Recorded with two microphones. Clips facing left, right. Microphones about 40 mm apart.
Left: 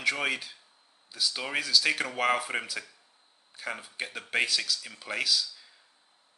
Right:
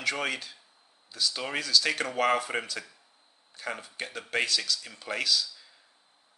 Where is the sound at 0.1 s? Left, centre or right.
Centre.